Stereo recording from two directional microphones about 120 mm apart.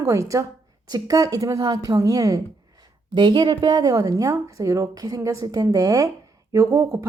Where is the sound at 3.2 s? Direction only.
40° right (ahead or behind).